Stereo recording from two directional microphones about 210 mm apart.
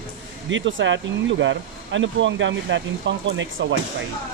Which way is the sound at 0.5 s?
65° right (ahead or behind).